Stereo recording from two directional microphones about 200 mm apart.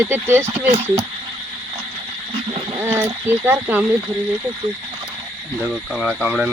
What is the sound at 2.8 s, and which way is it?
Speech, 15° right (ahead or behind).